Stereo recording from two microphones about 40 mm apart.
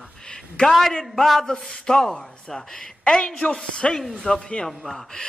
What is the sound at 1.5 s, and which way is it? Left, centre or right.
A man's voice, left.